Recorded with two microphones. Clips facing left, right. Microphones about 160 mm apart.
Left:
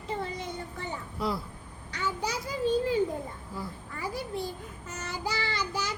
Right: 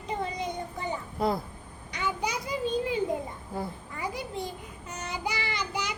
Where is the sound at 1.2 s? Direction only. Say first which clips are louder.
Right 4 dB; 50° right (ahead or behind).